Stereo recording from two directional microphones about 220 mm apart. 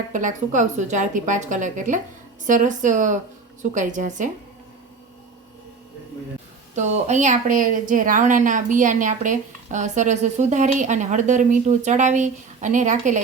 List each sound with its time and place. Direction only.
0.1 s speech: 35° right (ahead or behind)
6.7 s speech: 30° right (ahead or behind)